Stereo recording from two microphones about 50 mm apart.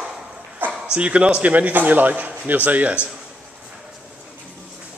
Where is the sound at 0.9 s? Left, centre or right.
Right.